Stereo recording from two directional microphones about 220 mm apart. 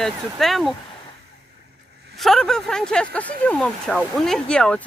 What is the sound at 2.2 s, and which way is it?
Speech, centre (ahead or behind).